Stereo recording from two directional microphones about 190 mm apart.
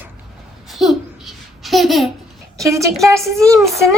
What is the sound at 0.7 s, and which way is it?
Babbling, centre (ahead or behind).